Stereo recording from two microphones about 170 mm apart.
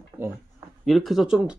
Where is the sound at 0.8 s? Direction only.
Centre (ahead or behind).